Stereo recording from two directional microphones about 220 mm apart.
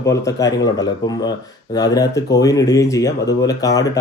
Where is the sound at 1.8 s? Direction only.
15° left (ahead or behind).